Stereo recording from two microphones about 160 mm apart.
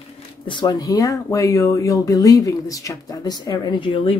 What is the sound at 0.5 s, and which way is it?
Speech, 30° left (ahead or behind).